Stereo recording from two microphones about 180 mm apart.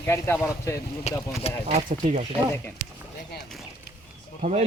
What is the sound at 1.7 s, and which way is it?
Speech, 40° right (ahead or behind).